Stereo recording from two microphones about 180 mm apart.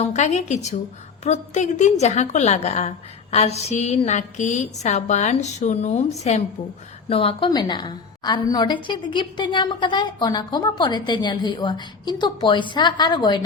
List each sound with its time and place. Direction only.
0.0 s a woman's voice: 40° left (ahead or behind)